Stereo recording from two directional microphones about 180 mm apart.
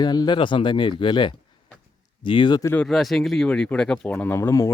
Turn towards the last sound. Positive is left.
turn(degrees=15)  # may be behind; listen again after turning